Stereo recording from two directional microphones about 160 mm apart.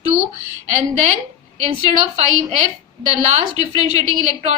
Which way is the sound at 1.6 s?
45° right (ahead or behind).